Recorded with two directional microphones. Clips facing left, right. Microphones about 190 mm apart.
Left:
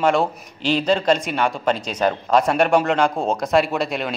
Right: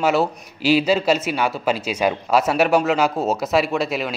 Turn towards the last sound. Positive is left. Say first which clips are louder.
# right 1 dB
turn(degrees=0)  # may be behind; listen again after turning